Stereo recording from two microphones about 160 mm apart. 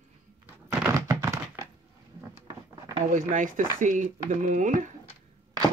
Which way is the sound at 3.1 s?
55° right (ahead or behind).